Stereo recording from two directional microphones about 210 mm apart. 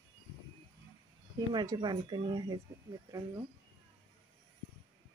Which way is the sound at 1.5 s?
20° right (ahead or behind).